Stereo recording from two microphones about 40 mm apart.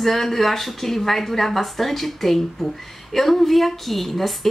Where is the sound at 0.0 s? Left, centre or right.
Centre.